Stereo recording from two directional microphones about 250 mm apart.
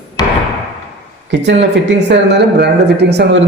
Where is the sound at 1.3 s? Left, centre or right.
Right.